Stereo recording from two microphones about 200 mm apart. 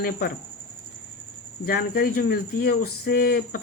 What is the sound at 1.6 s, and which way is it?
Speech, 50° left (ahead or behind).